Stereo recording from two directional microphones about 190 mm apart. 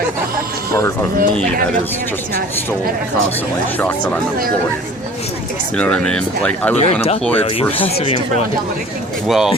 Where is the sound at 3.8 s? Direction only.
10° left (ahead or behind).